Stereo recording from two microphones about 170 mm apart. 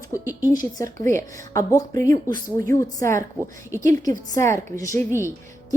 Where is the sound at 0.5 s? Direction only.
20° left (ahead or behind).